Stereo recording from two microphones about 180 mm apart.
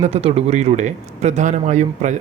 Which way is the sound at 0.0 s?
35° right (ahead or behind).